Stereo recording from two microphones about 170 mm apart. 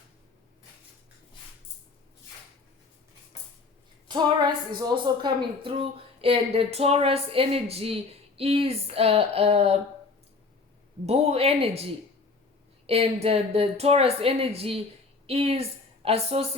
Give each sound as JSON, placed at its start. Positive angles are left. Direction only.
{"t": 4.1, "sound": "a woman's voice", "side_deg": -25}
{"t": 11.0, "sound": "a woman's voice", "side_deg": -35}
{"t": 12.9, "sound": "a woman's voice", "side_deg": -35}